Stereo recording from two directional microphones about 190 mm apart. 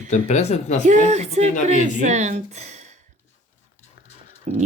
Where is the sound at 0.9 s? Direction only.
40° right (ahead or behind).